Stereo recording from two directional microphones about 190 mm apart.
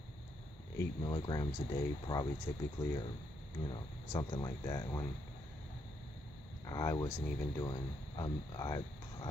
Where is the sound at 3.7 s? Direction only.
20° left (ahead or behind).